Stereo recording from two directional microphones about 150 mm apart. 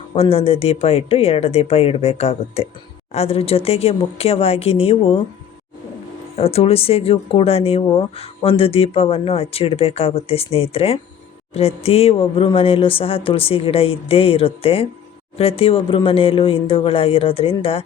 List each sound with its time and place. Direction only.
0.1 s speech: 40° left (ahead or behind)
6.3 s speech: 40° left (ahead or behind)